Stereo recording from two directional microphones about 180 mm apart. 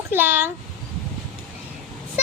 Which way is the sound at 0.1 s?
10° right (ahead or behind).